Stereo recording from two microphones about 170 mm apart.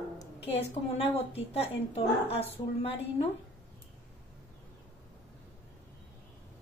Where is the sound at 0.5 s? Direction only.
35° left (ahead or behind).